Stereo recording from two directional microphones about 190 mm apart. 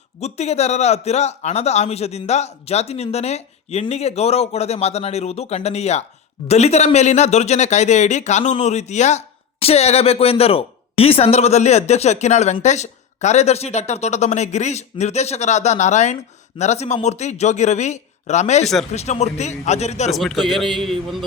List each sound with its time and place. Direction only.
0.2 s speech: 35° left (ahead or behind)
20.1 s a man's voice: centre (ahead or behind)